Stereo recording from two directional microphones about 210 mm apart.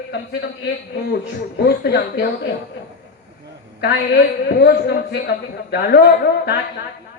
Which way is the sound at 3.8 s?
50° left (ahead or behind).